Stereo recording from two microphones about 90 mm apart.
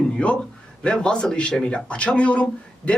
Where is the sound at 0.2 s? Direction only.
15° left (ahead or behind).